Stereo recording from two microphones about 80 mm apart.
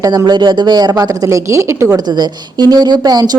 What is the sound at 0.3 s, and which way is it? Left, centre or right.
Speech, right.